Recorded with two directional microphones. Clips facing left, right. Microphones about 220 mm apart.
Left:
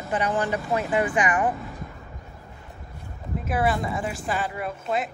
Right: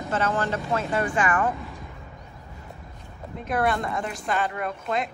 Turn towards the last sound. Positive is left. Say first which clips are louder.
# even
turn(degrees=5)  # may be behind; listen again after turning